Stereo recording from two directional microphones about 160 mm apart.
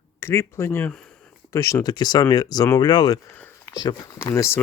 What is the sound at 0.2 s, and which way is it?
Speech, 15° left (ahead or behind).